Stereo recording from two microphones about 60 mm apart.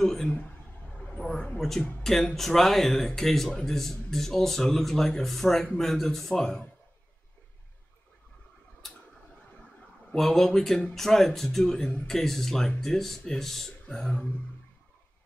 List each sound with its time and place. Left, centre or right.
0.0 s a man's voice: centre
0.3 s a sound: centre
2.0 s speech: centre
8.8 s a sound: centre
10.1 s speech: centre
12.1 s speech: centre